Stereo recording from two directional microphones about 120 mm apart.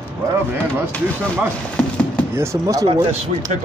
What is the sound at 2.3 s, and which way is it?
Speech, 25° right (ahead or behind).